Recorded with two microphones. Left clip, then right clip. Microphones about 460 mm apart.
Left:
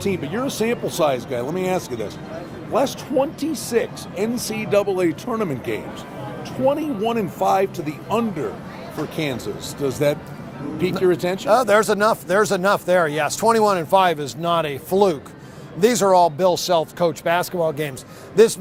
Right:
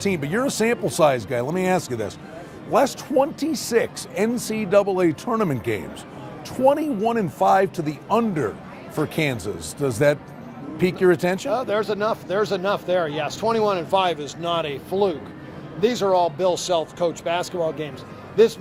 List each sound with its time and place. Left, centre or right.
0.0 s speech: right
11.4 s speech: left